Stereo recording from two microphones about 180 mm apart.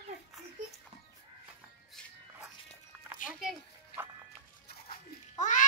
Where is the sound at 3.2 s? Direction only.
Centre (ahead or behind).